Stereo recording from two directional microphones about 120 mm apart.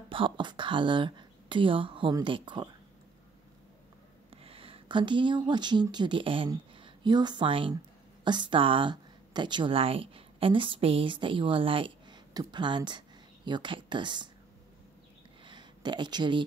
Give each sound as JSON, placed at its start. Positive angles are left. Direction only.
{"t": 0.1, "sound": "speech", "side_deg": -45}
{"t": 4.3, "sound": "speech", "side_deg": -50}
{"t": 15.4, "sound": "a sound", "side_deg": -40}